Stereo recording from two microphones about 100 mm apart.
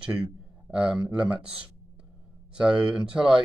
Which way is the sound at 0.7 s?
10° right (ahead or behind).